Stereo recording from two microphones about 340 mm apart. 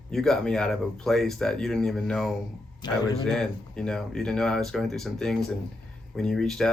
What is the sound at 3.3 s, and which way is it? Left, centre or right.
Speech, centre.